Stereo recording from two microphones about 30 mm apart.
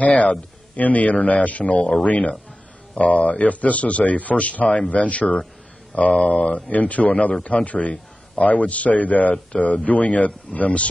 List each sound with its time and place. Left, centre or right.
0.0 s speech: left